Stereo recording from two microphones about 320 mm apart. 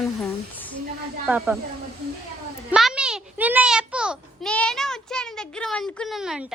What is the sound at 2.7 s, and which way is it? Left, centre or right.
A child's voice, centre.